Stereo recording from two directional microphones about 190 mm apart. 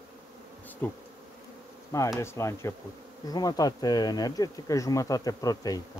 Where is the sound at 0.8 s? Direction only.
10° left (ahead or behind).